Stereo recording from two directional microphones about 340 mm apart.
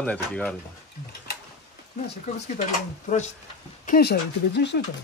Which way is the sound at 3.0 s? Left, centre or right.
Centre.